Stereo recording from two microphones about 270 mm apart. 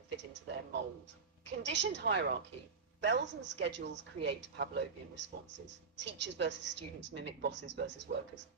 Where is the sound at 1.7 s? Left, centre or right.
Right.